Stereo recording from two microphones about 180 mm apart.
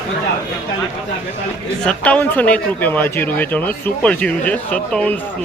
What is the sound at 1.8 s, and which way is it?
Speech, 10° left (ahead or behind).